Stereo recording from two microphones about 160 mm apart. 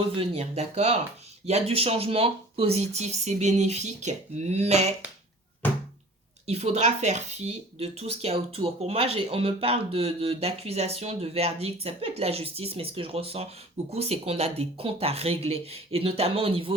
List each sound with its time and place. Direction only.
0.1 s speech: 40° right (ahead or behind)
6.5 s speech: 40° right (ahead or behind)